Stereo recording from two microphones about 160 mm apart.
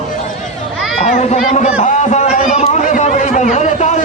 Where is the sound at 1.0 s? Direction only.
45° left (ahead or behind).